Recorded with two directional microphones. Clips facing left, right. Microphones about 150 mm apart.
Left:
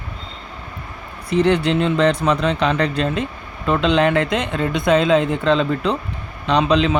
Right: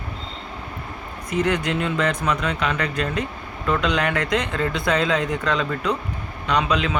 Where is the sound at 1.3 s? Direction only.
30° left (ahead or behind).